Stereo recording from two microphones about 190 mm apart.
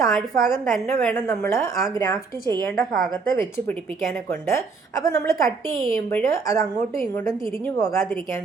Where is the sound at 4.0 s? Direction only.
Centre (ahead or behind).